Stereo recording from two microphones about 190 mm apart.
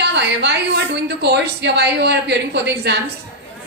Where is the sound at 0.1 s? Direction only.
60° right (ahead or behind).